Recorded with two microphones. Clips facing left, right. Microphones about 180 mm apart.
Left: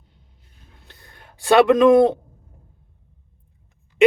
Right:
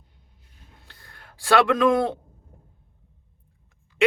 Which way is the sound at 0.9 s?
20° left (ahead or behind).